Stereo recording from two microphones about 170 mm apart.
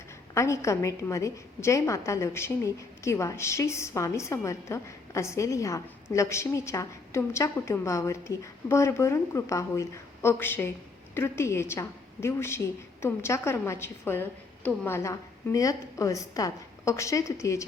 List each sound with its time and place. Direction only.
0.3 s a woman's voice: 15° left (ahead or behind)